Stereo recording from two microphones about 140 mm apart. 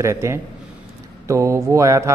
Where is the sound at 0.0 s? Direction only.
20° right (ahead or behind).